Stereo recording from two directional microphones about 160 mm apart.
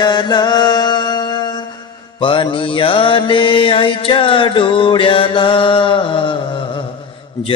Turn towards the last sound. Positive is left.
turn(degrees=30)  # may be behind; listen again after turning